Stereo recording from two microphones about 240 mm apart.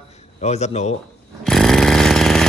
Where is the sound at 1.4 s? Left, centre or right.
Centre.